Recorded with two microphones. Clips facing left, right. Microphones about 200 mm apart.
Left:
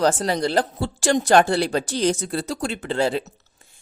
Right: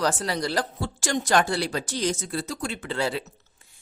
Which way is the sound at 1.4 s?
60° left (ahead or behind).